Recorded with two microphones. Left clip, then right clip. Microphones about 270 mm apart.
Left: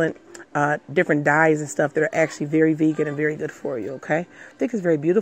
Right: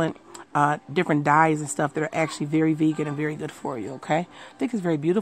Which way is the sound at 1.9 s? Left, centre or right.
Centre.